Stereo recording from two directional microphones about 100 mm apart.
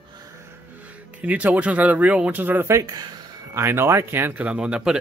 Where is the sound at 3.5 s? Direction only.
25° right (ahead or behind); by 4.9 s 10° right (ahead or behind).